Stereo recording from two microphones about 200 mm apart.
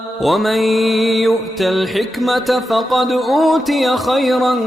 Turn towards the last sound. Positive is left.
turn(degrees=0)  # may be behind; listen again after turning